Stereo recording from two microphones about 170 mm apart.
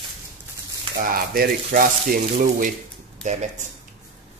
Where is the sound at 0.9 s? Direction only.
60° right (ahead or behind).